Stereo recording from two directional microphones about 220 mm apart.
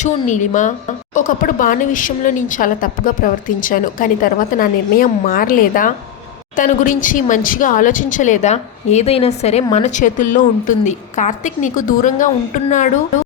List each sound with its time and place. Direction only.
0.0 s speech: 35° left (ahead or behind)